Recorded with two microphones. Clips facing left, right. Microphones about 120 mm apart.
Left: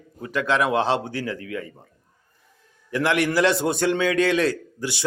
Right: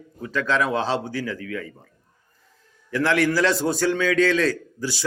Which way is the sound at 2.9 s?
20° left (ahead or behind).